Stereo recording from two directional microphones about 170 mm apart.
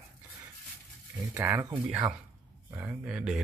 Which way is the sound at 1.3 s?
15° right (ahead or behind).